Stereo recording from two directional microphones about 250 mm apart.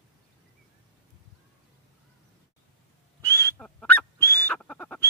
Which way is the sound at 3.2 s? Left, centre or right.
Centre.